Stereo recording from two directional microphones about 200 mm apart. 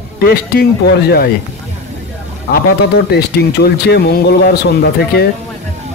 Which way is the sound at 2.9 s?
55° left (ahead or behind).